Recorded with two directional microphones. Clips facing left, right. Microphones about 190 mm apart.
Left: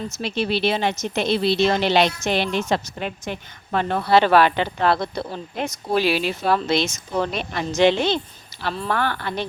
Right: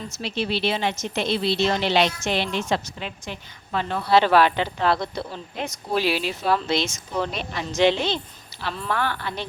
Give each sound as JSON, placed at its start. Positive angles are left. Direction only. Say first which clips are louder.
{"t": 0.2, "sound": "a woman's voice", "louder": "left 3 dB", "side_deg": 55}